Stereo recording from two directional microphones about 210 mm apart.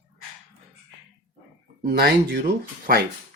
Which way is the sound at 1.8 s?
45° right (ahead or behind).